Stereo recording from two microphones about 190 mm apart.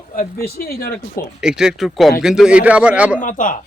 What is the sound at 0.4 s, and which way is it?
Speech, 55° left (ahead or behind).